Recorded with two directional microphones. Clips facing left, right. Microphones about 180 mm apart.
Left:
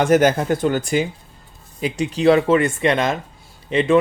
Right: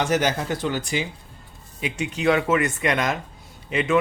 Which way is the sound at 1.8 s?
35° left (ahead or behind).